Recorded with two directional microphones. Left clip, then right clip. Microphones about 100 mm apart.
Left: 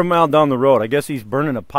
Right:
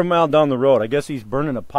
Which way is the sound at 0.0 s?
20° left (ahead or behind).